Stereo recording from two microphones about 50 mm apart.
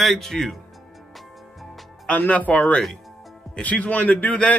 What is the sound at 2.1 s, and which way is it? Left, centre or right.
Speech, left.